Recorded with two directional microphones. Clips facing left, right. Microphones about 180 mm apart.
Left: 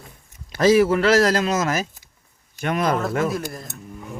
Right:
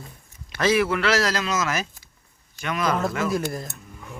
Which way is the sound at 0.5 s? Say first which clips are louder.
Left 6 dB; 40° left (ahead or behind).